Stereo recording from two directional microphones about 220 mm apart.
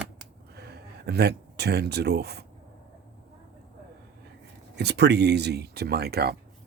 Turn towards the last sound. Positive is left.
turn(degrees=-45)  # may be behind; listen again after turning